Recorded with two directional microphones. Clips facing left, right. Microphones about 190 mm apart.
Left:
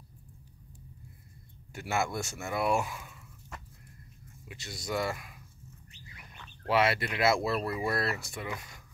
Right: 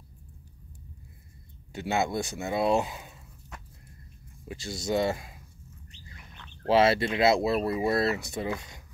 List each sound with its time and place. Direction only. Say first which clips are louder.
1.7 s speech: right 4 dB; 20° right (ahead or behind)
4.5 s speech: right 7 dB; 30° right (ahead or behind)
6.6 s speech: right 5 dB; 30° right (ahead or behind)